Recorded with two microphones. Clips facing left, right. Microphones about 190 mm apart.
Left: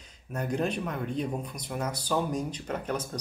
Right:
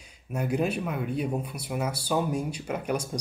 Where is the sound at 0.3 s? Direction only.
10° right (ahead or behind).